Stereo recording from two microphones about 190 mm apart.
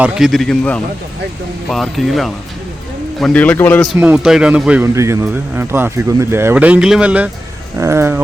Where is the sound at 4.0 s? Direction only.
5° right (ahead or behind).